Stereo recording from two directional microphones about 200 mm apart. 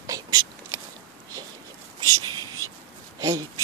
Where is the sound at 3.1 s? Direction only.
15° right (ahead or behind).